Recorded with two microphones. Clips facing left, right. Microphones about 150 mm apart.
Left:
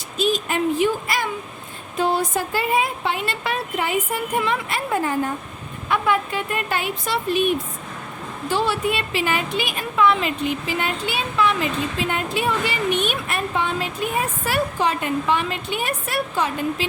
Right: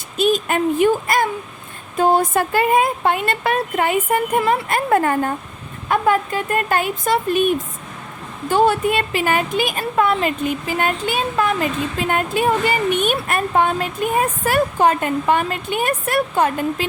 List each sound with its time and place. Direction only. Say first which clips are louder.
0.2 s speech: right 4 dB; 55° right (ahead or behind)
5.9 s speech: right 4 dB; 45° right (ahead or behind)